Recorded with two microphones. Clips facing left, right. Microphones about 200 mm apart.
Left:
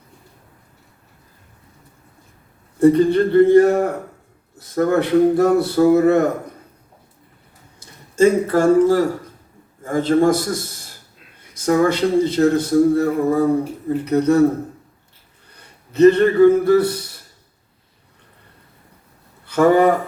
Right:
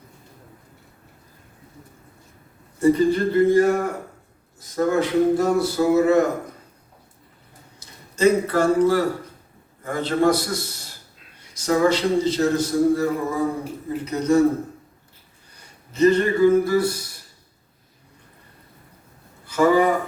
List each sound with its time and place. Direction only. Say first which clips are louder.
2.8 s a man's voice: left 4 dB; 65° left (ahead or behind)
7.8 s a man's voice: left 6 dB; 50° left (ahead or behind)
15.9 s a man's voice: left 5 dB; 60° left (ahead or behind)
19.5 s speech: left 4 dB; 60° left (ahead or behind)